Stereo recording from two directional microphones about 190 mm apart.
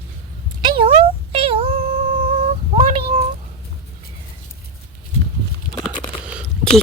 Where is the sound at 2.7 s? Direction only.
30° right (ahead or behind).